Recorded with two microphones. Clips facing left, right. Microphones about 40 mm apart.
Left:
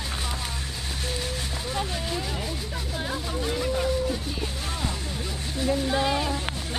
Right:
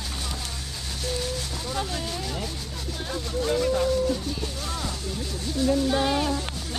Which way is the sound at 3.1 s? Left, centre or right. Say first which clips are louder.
Right 5 dB; centre.